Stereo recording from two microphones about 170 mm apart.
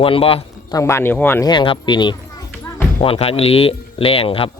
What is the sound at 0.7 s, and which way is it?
Speech, 15° left (ahead or behind).